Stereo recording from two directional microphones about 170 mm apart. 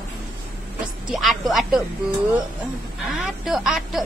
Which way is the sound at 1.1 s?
Centre (ahead or behind).